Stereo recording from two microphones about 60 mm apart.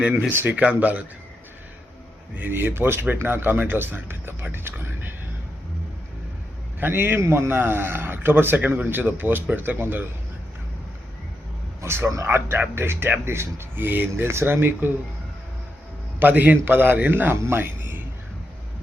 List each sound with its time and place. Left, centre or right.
0.3 s speech: right
0.5 s speech: right
2.3 s speech: right
6.7 s a man's voice: right
11.8 s speech: right
16.2 s speech: right
17.3 s a man's voice: right